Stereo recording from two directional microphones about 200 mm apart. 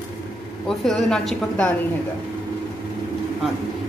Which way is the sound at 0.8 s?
5° left (ahead or behind).